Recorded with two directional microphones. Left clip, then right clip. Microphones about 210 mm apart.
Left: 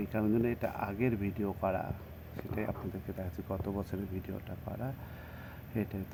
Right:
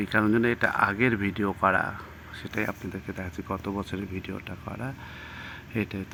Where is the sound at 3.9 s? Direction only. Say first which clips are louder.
Right 6 dB; 10° right (ahead or behind).